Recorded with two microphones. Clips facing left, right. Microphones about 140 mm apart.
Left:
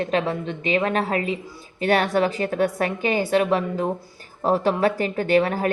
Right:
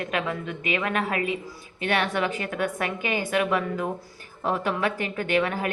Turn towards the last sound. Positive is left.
turn(degrees=40)  # may be behind; listen again after turning